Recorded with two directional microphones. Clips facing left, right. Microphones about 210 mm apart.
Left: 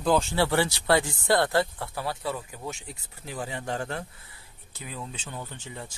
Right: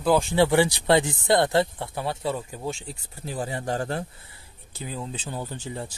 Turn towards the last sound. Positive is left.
turn(degrees=-35)  # may be behind; listen again after turning